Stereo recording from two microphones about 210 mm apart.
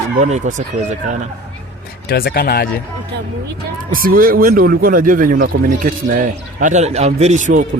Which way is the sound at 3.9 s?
45° right (ahead or behind).